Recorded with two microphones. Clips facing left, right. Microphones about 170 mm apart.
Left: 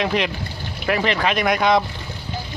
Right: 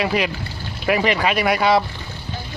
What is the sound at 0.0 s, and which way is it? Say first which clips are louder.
Speech: right 1 dB; 5° right (ahead or behind).